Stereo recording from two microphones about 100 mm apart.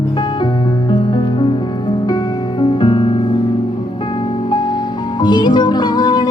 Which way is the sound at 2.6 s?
50° left (ahead or behind).